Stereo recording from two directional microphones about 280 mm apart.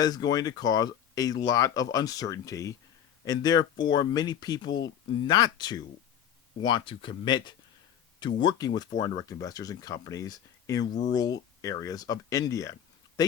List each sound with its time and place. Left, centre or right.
0.0 s speech: centre